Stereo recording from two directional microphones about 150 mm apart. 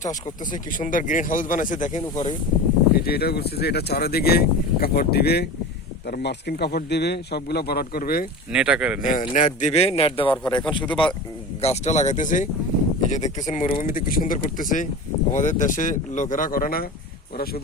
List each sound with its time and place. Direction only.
0.0 s speech: 60° left (ahead or behind)
3.0 s speech: 90° left
8.5 s speech: 5° right (ahead or behind)
9.0 s a man's voice: 60° left (ahead or behind); by 10.8 s 30° left (ahead or behind)
10.8 s a man's voice: 5° left (ahead or behind)
11.6 s a man's voice: 45° left (ahead or behind); by 16.8 s 70° left (ahead or behind)
17.3 s speech: 90° left